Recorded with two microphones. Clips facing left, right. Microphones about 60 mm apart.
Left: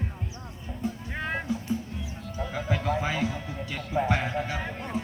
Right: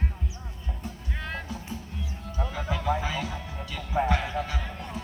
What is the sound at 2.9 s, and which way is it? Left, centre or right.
Music, left.